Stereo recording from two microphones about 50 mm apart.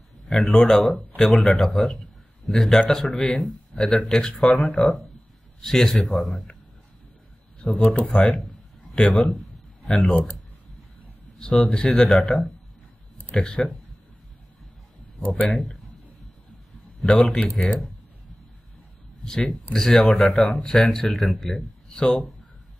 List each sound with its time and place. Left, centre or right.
0.3 s speech: centre
3.7 s speech: centre
7.6 s speech: left
11.3 s speech: centre
13.4 s speech: left
15.4 s speech: centre
17.0 s speech: centre
19.2 s speech: centre